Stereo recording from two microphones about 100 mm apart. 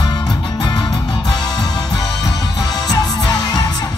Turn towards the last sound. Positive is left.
turn(degrees=40)  # may be behind; listen again after turning